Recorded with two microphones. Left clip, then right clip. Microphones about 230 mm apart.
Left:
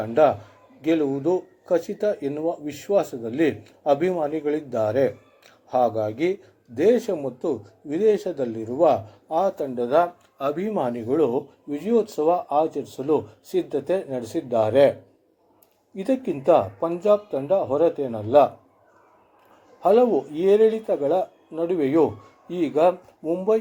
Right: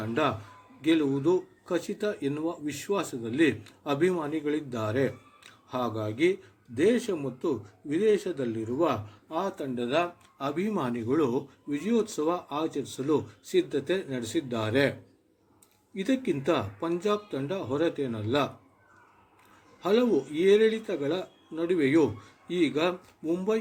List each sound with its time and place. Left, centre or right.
0.1 s a man's voice: centre
16.0 s a man's voice: centre
19.8 s a man's voice: centre